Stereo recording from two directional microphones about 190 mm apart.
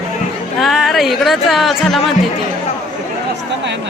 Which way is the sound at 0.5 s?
Centre (ahead or behind).